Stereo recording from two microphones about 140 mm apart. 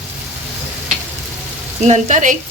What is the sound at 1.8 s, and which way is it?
Speech, 55° right (ahead or behind).